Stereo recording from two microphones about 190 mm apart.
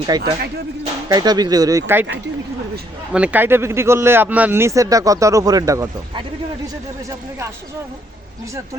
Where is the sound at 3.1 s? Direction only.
5° right (ahead or behind).